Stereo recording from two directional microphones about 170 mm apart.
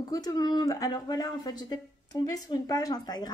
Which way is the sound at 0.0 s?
20° left (ahead or behind).